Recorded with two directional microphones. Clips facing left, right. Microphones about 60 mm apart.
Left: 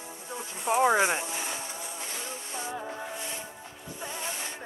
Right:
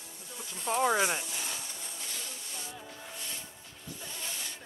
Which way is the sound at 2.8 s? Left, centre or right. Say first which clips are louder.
Left 9 dB; left.